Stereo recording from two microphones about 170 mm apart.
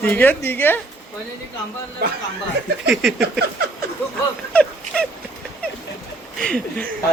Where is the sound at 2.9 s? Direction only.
Centre (ahead or behind).